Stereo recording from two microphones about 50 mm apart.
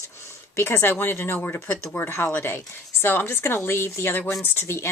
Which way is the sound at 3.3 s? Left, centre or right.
Left.